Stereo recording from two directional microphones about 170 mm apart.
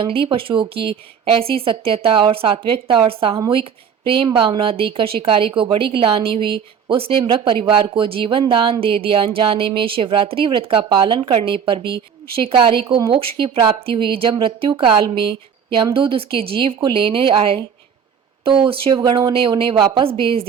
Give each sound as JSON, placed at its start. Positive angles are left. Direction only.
{"t": 0.0, "sound": "speech", "side_deg": -30}